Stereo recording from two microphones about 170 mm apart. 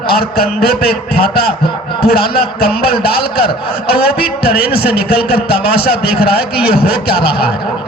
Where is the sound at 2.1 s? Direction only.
65° left (ahead or behind).